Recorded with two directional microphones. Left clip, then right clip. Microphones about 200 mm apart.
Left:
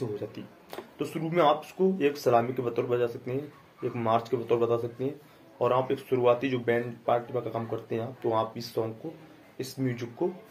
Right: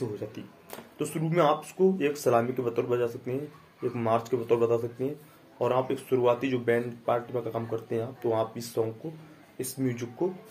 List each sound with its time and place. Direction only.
0.3 s speech: 20° right (ahead or behind)